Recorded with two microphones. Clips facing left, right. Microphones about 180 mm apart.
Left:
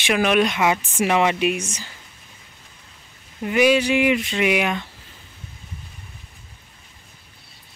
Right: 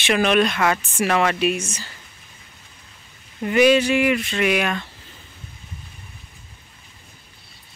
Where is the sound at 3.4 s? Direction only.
5° left (ahead or behind).